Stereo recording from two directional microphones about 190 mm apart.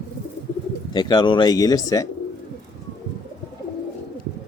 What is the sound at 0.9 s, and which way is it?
Speech, 25° left (ahead or behind).